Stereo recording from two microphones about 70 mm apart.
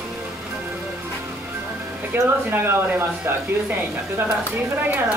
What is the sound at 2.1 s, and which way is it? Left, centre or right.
Speech, right.